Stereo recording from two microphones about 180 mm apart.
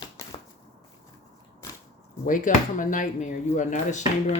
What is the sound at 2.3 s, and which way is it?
Speech, 45° left (ahead or behind).